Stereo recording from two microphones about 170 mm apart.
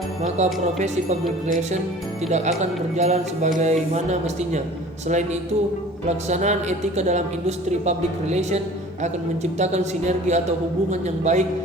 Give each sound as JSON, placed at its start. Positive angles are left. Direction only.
{"t": 0.2, "sound": "a woman's voice", "side_deg": -40}
{"t": 2.3, "sound": "a woman's voice", "side_deg": -40}